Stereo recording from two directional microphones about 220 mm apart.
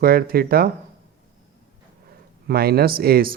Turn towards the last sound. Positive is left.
turn(degrees=-40)  # may be behind; listen again after turning